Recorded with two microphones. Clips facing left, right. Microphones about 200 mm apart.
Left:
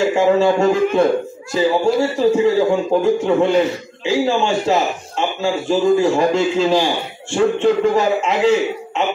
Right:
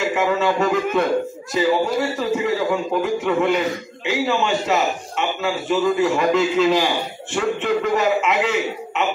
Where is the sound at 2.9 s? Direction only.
30° left (ahead or behind).